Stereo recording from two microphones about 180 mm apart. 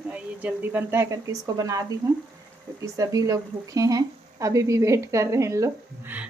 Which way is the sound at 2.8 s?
20° right (ahead or behind).